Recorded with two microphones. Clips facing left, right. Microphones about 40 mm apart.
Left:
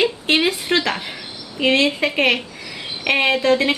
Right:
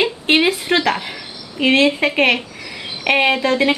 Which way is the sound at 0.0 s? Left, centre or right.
Centre.